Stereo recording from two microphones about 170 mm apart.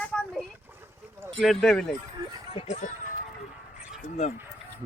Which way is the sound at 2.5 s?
35° left (ahead or behind).